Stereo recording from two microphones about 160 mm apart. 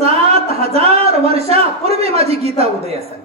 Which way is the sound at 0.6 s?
40° right (ahead or behind).